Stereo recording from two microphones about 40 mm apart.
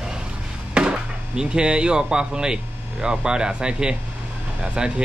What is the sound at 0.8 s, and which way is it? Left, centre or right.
Chop, right.